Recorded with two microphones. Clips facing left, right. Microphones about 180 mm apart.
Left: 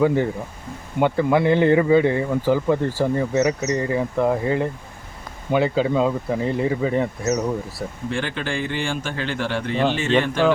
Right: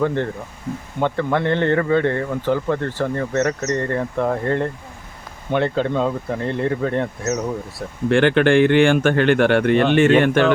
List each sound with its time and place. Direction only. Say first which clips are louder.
0.0 s speech: left 2 dB; 5° left (ahead or behind)
8.1 s speech: right 14 dB; 65° right (ahead or behind)